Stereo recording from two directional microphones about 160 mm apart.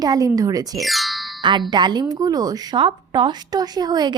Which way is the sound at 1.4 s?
30° right (ahead or behind).